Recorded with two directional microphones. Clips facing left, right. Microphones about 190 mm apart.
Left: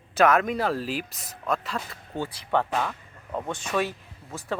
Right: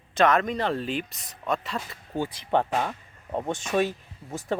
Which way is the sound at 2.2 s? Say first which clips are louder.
Right 1 dB; 20° right (ahead or behind).